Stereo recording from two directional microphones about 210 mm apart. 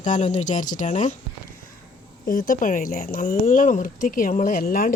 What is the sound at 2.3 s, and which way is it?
Speech, 40° left (ahead or behind).